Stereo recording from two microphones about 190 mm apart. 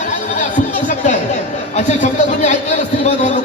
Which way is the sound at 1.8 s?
40° left (ahead or behind).